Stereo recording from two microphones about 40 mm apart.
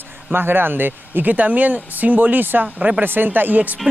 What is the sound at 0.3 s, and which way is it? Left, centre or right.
Speech, right.